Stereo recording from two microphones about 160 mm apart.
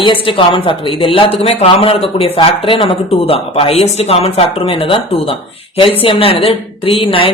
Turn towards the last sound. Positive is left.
turn(degrees=35)  # may be behind; listen again after turning